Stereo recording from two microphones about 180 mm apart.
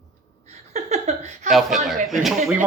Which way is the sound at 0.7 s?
40° right (ahead or behind).